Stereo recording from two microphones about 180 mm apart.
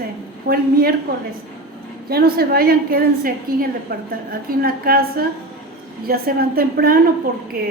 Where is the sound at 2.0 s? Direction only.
60° right (ahead or behind).